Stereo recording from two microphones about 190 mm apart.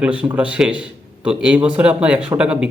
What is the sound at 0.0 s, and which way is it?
A man's voice, 5° right (ahead or behind).